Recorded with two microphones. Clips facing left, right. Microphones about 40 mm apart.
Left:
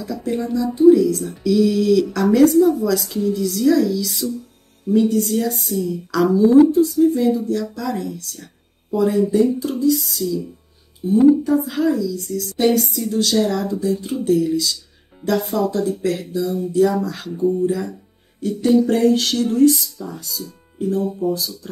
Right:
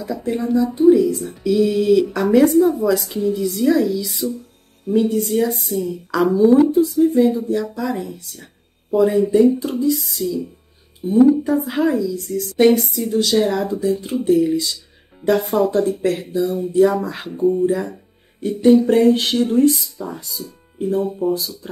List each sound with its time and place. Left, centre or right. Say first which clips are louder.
0.0 s a sound: right 1 dB; centre
0.5 s speech: left 1 dB; right
9.9 s speech: even; centre
11.0 s speech: even; right
12.2 s speech: right 2 dB; centre
12.5 s a sound: right 3 dB; right
13.1 s speech: right 2 dB; centre
13.4 s speech: right 1 dB; right
15.2 s a sound: right 3 dB; right
16.9 s speech: even; right
17.3 s speech: right 2 dB; centre
17.6 s speech: right 2 dB; right